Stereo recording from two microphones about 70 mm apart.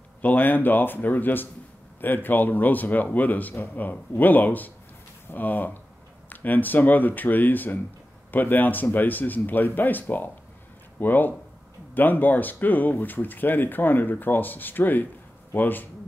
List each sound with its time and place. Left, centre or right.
0.2 s speech: left